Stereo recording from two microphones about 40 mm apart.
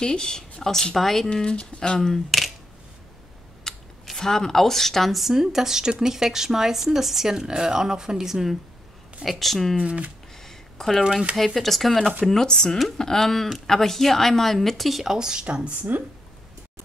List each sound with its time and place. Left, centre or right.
0.0 s speech: centre
1.3 s speech: left
2.0 s speech: centre
3.6 s speech: centre
5.3 s speech: centre
9.2 s speech: centre
9.8 s speech: right
10.3 s a sound: centre
11.3 s speech: centre
15.1 s speech: centre
15.7 s speech: right